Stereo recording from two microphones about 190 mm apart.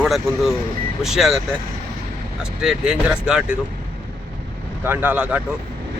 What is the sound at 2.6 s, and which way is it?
Speech, 5° right (ahead or behind).